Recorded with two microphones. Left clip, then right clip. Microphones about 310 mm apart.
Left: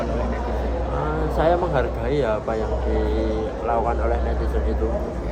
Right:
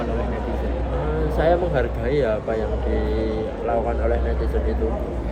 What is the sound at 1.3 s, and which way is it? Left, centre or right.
Speech, centre.